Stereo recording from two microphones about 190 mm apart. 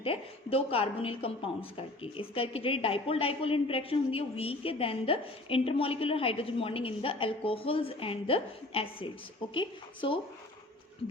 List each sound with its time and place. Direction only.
0.0 s a woman's voice: 30° left (ahead or behind)